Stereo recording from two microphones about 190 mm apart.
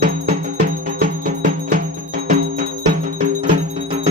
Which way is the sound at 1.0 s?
50° right (ahead or behind).